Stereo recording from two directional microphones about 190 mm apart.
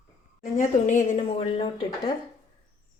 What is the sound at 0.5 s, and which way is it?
A woman's voice, 40° left (ahead or behind).